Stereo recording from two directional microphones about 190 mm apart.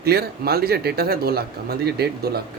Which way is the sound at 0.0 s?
55° right (ahead or behind).